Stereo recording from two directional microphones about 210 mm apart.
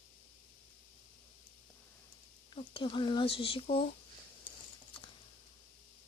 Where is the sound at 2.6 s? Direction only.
25° left (ahead or behind).